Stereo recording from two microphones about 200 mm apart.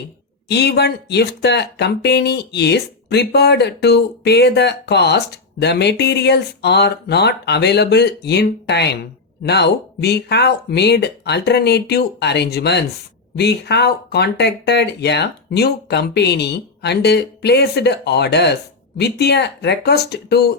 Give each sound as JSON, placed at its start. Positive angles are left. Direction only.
{"t": 0.4, "sound": "speech", "side_deg": 55}